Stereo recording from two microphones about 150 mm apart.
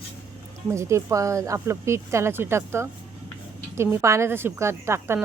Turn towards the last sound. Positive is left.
turn(degrees=-15)  # may be behind; listen again after turning